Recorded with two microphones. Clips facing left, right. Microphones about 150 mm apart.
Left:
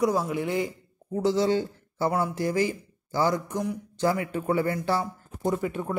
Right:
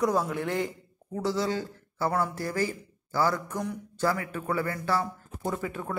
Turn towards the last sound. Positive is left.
turn(degrees=20)  # may be behind; listen again after turning